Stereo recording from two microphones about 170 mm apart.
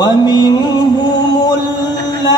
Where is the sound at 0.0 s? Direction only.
25° left (ahead or behind).